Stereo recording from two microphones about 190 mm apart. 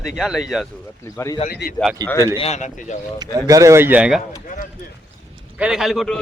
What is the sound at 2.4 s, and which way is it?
Speech, 35° left (ahead or behind).